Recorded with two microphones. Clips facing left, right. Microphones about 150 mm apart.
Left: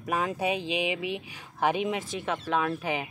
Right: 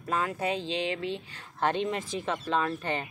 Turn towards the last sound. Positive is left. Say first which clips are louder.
# left 1 dB
turn(degrees=10)  # may be behind; listen again after turning